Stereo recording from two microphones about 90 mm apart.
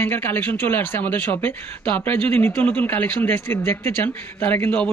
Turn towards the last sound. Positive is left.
turn(degrees=15)  # may be behind; listen again after turning